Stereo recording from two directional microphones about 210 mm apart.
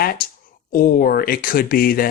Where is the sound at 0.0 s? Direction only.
45° left (ahead or behind).